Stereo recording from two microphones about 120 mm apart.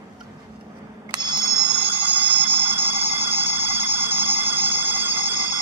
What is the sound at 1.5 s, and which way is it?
Emergency vehicle, 20° right (ahead or behind).